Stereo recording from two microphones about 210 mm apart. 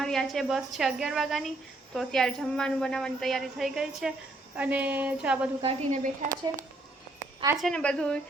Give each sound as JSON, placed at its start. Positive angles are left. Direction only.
{"t": 0.0, "sound": "a woman's voice", "side_deg": 0}
{"t": 5.6, "sound": "a woman's voice", "side_deg": -35}
{"t": 7.5, "sound": "a woman's voice", "side_deg": 0}